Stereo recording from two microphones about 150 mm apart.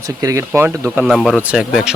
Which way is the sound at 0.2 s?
20° right (ahead or behind).